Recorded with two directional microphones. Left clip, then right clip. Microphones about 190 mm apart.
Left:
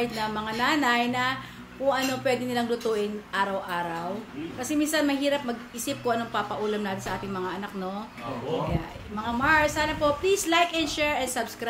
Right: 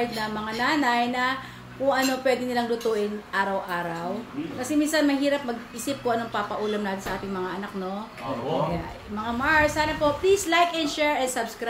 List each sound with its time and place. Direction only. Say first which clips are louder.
0.0 s a woman's voice: right 1 dB; 15° left (ahead or behind)
9.2 s a woman's voice: right 1 dB; 10° left (ahead or behind)